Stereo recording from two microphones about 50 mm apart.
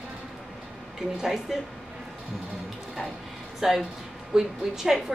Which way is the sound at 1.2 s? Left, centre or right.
Centre.